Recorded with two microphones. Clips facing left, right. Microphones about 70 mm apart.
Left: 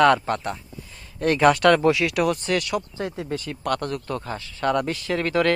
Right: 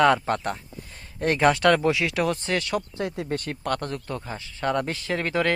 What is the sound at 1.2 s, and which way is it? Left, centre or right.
Speech, right.